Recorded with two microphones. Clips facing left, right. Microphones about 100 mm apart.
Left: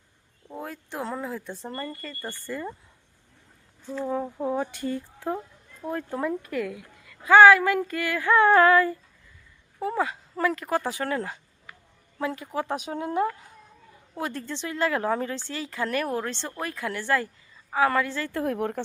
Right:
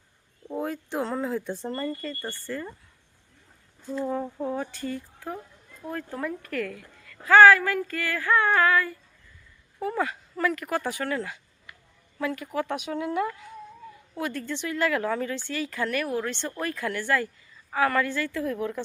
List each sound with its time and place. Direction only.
0.5 s speech: centre (ahead or behind)
4.0 s a woman's voice: 5° left (ahead or behind); by 16.5 s 30° left (ahead or behind)
16.5 s a woman's voice: 20° left (ahead or behind)
18.3 s a woman's voice: 55° left (ahead or behind)